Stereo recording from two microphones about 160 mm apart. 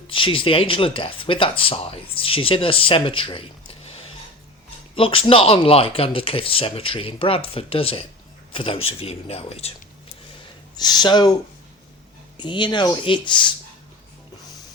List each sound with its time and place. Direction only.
0.1 s speech: 35° left (ahead or behind)
4.9 s speech: 35° left (ahead or behind)
10.8 s speech: 25° left (ahead or behind)
12.4 s speech: 30° left (ahead or behind)